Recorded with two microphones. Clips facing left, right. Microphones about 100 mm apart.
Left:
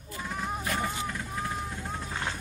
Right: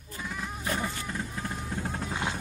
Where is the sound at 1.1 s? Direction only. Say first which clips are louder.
Even; 25° right (ahead or behind).